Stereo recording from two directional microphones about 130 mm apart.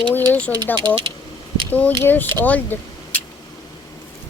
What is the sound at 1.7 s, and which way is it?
Speech, 15° left (ahead or behind).